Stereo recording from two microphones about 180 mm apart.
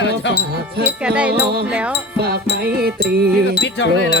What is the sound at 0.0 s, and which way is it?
Music, 90° left.